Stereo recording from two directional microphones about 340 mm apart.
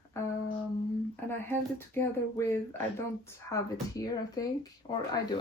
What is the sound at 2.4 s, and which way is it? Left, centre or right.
Speech, centre.